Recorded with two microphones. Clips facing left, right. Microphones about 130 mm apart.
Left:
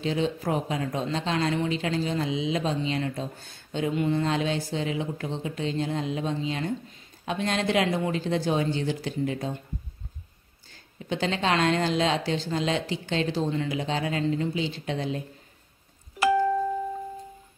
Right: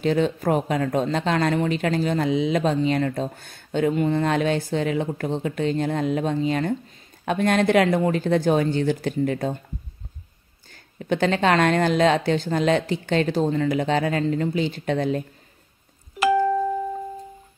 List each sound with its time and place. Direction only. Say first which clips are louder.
0.0 s a woman's voice: right 6 dB; 55° right (ahead or behind)
11.0 s speech: right 7 dB; 55° right (ahead or behind)